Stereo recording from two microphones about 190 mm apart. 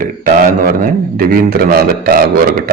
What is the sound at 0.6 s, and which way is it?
A man's voice, 50° right (ahead or behind).